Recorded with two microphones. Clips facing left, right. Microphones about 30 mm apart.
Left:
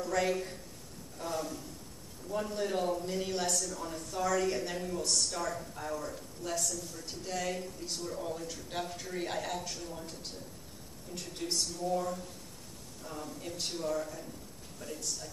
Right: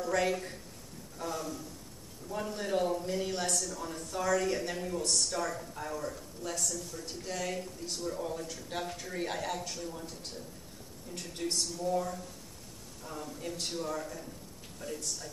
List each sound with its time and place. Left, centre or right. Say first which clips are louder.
0.0 s a man's voice: right 1 dB; centre
2.2 s speech: left 2 dB; centre
11.1 s speech: right 1 dB; centre